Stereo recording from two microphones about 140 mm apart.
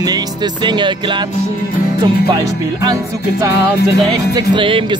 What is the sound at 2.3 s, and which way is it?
Speech, 30° right (ahead or behind).